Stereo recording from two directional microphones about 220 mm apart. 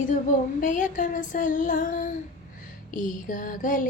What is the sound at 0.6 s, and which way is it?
Mantra, 35° left (ahead or behind).